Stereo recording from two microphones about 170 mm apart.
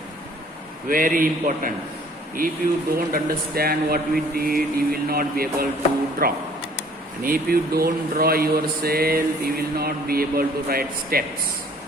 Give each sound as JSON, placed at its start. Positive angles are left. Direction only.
{"t": 0.9, "sound": "speech", "side_deg": -55}